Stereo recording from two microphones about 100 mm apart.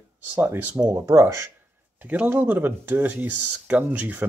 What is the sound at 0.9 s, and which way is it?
Speech, 35° right (ahead or behind).